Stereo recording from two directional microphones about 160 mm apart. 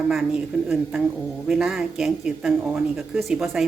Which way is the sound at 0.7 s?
5° right (ahead or behind).